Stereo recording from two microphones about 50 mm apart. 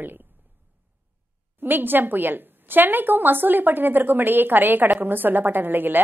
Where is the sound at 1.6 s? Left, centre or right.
Right.